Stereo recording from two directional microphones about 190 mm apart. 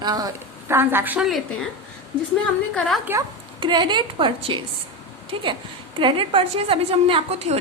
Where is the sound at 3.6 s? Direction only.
25° right (ahead or behind).